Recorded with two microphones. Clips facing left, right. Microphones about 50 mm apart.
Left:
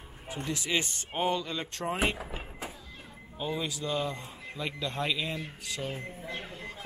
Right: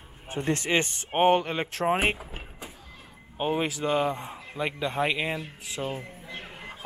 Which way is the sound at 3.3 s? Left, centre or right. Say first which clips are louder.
Right 7 dB; right.